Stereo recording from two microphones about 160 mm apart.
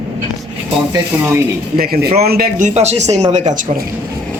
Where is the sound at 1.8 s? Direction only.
75° right (ahead or behind).